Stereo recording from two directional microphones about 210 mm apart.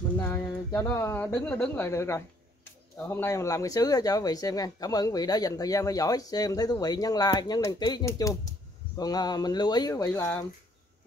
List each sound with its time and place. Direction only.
0.2 s speech: 10° left (ahead or behind)